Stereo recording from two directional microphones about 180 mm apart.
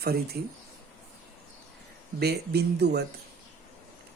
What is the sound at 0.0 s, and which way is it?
Speech, 60° right (ahead or behind).